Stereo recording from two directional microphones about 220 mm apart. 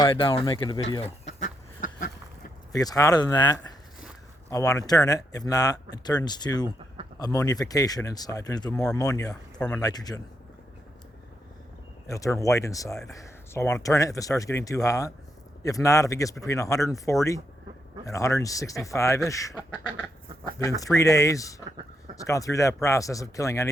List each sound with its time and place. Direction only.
0.0 s speech: 25° left (ahead or behind); by 2.1 s 40° left (ahead or behind)
2.7 s speech: 15° left (ahead or behind)
9.3 s speech: 5° left (ahead or behind)
9.8 s speech: 15° left (ahead or behind)
12.0 s speech: 15° left (ahead or behind)
20.6 s speech: 15° left (ahead or behind)